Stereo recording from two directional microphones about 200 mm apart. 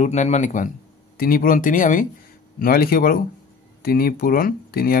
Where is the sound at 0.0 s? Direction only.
35° left (ahead or behind).